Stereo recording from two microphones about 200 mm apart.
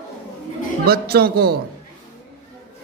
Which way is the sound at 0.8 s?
50° right (ahead or behind).